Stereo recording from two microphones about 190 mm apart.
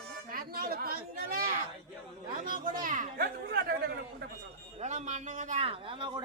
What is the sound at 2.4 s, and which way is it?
Speech, 45° right (ahead or behind).